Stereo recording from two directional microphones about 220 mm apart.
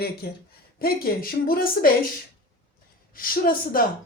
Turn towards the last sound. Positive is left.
turn(degrees=40)  # may be behind; listen again after turning